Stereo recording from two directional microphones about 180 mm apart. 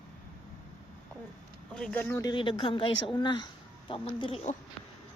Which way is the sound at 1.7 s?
5° left (ahead or behind).